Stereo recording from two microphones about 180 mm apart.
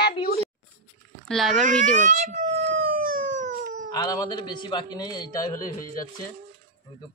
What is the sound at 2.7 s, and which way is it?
Howl, 50° right (ahead or behind).